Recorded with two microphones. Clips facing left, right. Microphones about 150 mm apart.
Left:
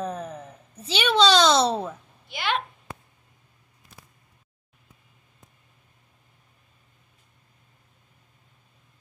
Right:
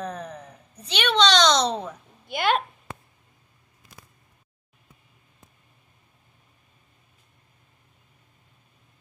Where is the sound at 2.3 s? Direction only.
50° right (ahead or behind).